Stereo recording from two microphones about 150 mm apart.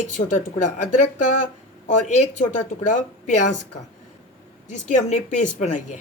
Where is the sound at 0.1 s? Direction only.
55° left (ahead or behind).